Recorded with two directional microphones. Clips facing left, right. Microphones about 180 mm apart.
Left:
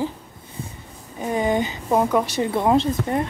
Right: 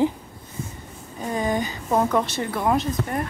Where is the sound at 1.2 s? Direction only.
20° left (ahead or behind).